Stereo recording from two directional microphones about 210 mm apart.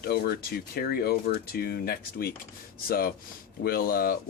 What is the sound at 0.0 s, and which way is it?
Speech, 45° left (ahead or behind).